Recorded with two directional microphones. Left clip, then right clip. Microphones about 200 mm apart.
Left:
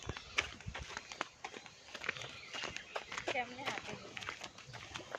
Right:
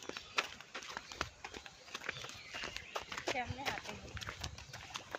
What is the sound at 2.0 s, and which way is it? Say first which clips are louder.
Walk: left 4 dB; 15° left (ahead or behind).